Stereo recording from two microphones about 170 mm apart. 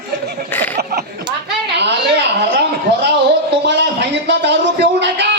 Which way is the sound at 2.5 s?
80° right.